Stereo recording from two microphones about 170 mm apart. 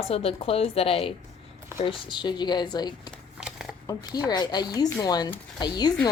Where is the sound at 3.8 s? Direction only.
20° left (ahead or behind).